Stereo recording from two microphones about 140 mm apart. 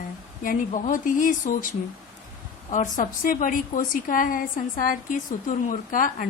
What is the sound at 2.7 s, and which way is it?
A woman's voice, 65° left (ahead or behind).